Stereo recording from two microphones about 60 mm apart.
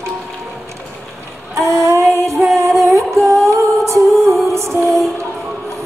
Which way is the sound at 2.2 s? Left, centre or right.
Right.